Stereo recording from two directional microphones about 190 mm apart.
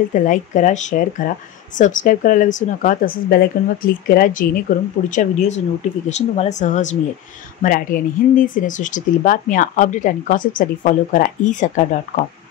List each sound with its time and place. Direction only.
0.1 s speech: 40° left (ahead or behind)